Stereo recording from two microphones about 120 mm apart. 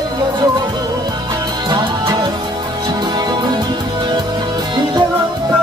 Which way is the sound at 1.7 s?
35° right (ahead or behind).